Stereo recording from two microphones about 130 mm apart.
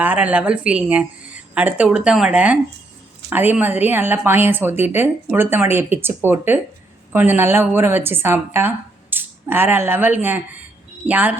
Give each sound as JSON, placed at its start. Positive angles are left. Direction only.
{"t": 0.0, "sound": "a woman's voice", "side_deg": -10}